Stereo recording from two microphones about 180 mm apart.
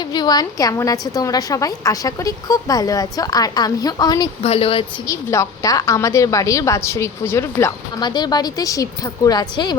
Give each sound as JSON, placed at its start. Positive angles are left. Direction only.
{"t": 0.1, "sound": "a woman's voice", "side_deg": 25}
{"t": 4.4, "sound": "speech", "side_deg": 30}
{"t": 5.0, "sound": "a woman's voice", "side_deg": 15}